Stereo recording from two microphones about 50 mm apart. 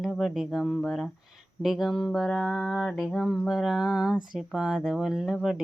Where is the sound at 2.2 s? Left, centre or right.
Centre.